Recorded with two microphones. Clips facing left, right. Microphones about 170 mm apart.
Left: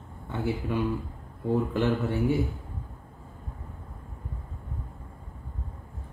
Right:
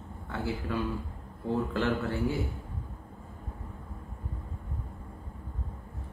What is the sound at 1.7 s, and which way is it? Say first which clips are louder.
Speech: left 3 dB; 20° left (ahead or behind).